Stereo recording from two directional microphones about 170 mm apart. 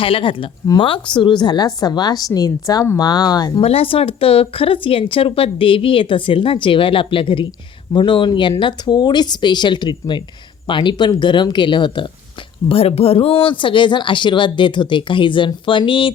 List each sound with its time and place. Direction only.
0.0 s speech: 30° left (ahead or behind)
3.6 s speech: 35° left (ahead or behind)